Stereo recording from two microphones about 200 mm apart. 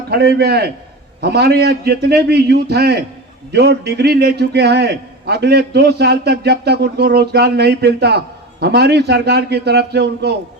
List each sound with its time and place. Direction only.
0.1 s a man's voice: 55° right (ahead or behind)